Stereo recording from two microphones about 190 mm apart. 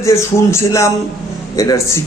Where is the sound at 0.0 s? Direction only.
15° left (ahead or behind).